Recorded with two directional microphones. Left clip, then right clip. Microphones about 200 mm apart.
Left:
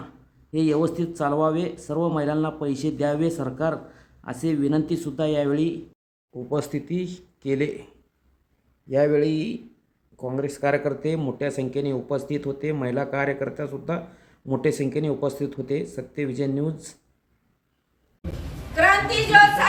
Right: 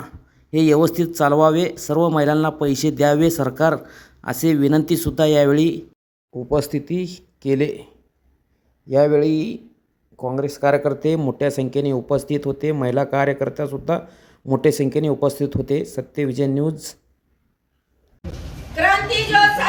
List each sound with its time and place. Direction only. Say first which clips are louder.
0.5 s speech: right 7 dB; 30° right (ahead or behind)
8.9 s speech: right 5 dB; 20° right (ahead or behind)